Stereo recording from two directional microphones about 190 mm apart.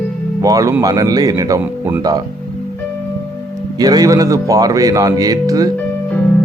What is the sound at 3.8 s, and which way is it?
Speech, 20° right (ahead or behind).